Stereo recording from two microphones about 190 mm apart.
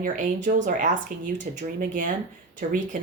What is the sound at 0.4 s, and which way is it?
Speech, 40° right (ahead or behind).